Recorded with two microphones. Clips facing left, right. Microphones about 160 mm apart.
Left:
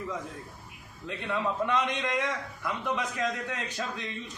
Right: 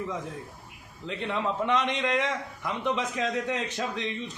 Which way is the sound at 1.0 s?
20° right (ahead or behind).